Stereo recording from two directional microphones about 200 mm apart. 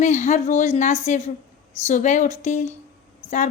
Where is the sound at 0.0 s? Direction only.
40° left (ahead or behind).